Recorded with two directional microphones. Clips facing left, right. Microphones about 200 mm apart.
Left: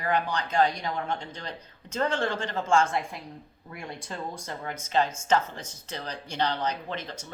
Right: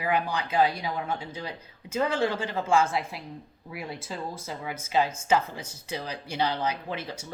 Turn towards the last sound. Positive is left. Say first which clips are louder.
# right 1 dB
turn(degrees=-10)  # may be behind; listen again after turning